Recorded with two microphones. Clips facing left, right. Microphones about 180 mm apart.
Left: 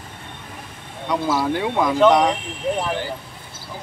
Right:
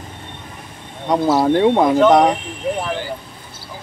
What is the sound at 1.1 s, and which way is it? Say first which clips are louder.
Speech: right 6 dB; 45° right (ahead or behind).